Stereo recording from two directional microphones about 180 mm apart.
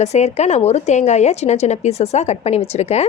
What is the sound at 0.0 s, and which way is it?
A woman's voice, 35° left (ahead or behind).